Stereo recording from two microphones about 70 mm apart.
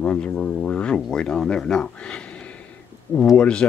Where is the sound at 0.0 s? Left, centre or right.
Centre.